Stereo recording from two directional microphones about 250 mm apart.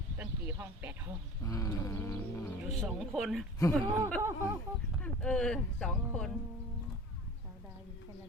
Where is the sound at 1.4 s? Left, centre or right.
Centre.